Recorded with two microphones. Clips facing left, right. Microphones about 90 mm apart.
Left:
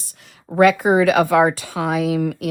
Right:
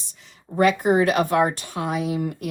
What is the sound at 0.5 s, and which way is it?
Speech, 90° left.